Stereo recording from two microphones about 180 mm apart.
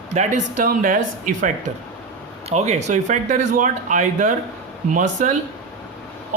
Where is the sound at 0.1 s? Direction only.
40° right (ahead or behind).